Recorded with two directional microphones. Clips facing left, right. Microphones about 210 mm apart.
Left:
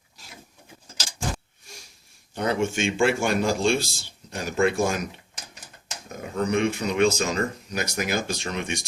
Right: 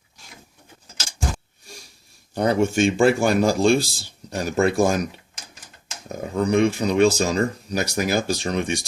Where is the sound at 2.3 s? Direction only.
40° right (ahead or behind).